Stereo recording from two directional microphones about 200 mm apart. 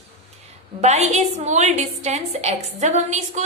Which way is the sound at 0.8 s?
35° right (ahead or behind).